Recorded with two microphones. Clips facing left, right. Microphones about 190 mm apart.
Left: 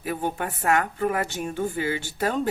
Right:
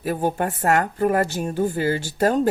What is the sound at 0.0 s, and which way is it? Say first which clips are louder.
A woman's voice: right 5 dB; 40° right (ahead or behind).